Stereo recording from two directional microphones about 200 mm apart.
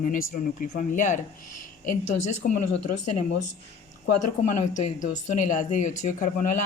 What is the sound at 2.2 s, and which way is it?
Speech, 40° left (ahead or behind).